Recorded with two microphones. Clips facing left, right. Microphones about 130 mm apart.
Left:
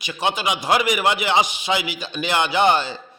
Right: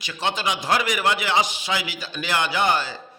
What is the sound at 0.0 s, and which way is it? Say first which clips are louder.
A man's voice: left 3 dB; 15° left (ahead or behind).